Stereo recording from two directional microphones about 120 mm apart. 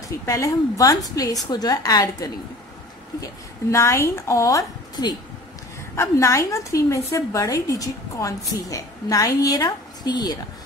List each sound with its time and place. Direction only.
0.2 s a woman's voice: 25° left (ahead or behind)
3.7 s a woman's voice: 20° left (ahead or behind)